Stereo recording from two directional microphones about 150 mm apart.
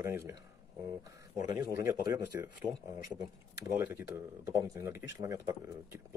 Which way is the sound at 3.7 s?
15° right (ahead or behind).